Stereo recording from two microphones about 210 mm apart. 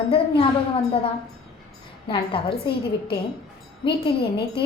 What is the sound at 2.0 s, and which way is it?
Speech, 25° left (ahead or behind).